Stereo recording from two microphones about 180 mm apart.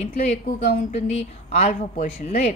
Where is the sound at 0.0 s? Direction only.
35° left (ahead or behind).